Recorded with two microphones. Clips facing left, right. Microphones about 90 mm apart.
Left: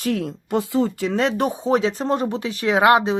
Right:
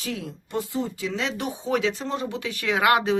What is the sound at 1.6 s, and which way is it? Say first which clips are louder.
Speech: left 4 dB; 35° left (ahead or behind).